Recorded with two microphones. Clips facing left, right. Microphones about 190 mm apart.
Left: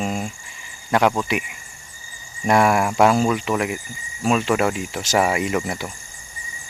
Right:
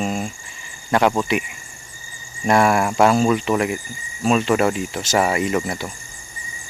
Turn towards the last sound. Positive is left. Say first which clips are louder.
# right 1 dB
turn(degrees=10)  # may be behind; listen again after turning